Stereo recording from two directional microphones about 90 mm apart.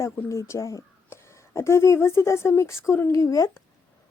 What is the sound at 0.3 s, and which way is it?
A woman's voice, 35° left (ahead or behind).